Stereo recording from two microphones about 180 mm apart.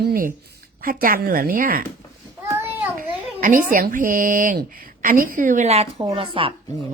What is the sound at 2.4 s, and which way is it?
Child singing, 10° right (ahead or behind).